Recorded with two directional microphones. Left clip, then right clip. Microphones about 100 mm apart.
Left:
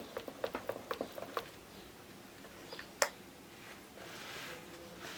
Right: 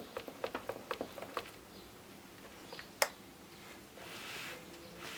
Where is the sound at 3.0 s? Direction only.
5° left (ahead or behind).